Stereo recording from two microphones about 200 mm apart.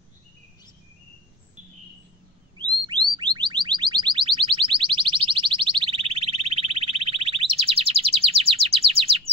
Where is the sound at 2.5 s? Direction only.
20° right (ahead or behind).